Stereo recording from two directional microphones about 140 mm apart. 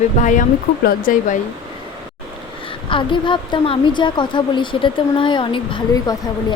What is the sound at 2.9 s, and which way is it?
A woman's voice, 35° left (ahead or behind).